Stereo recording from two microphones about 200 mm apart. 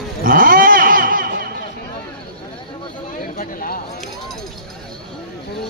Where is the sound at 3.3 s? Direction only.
45° left (ahead or behind).